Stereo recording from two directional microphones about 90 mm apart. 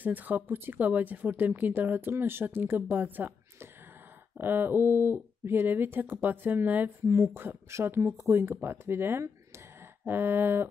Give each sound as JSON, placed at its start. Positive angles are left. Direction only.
{"t": 0.0, "sound": "speech", "side_deg": -20}
{"t": 4.4, "sound": "speech", "side_deg": -25}